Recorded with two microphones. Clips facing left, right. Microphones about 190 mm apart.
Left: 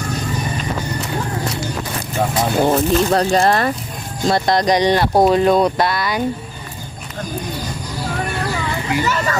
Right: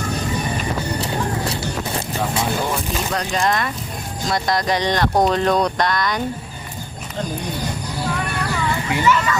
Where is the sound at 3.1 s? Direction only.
35° left (ahead or behind).